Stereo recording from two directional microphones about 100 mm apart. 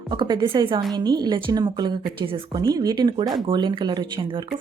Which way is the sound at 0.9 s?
45° right (ahead or behind).